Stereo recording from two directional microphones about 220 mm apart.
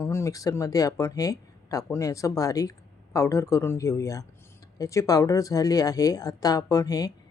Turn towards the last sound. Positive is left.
turn(degrees=15)  # may be behind; listen again after turning